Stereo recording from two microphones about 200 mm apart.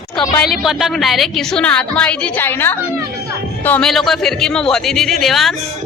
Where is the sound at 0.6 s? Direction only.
Centre (ahead or behind).